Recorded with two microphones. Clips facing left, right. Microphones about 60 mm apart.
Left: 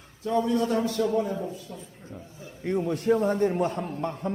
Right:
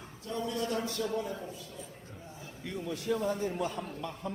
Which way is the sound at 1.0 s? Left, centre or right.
Left.